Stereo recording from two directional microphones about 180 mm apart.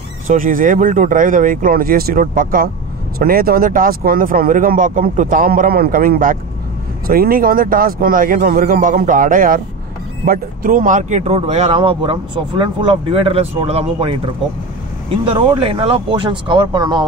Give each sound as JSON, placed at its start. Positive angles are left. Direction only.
{"t": 0.3, "sound": "speech", "side_deg": -50}
{"t": 15.2, "sound": "speech", "side_deg": -30}